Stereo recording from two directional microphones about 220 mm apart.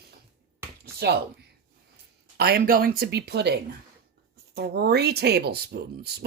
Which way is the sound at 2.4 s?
45° right (ahead or behind).